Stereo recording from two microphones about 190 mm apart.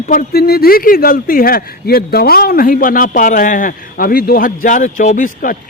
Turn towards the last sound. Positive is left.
turn(degrees=45)  # may be behind; listen again after turning